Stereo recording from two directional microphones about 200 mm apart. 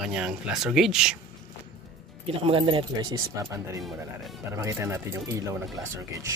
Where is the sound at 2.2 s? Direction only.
25° right (ahead or behind).